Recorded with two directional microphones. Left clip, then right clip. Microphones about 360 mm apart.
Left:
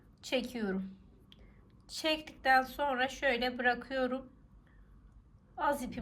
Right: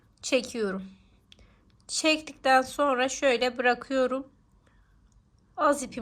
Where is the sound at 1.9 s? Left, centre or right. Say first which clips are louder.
Right 8 dB; centre.